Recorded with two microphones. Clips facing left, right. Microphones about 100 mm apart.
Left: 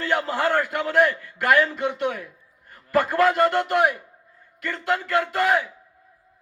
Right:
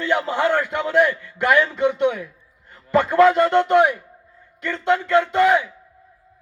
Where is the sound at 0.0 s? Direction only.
20° right (ahead or behind).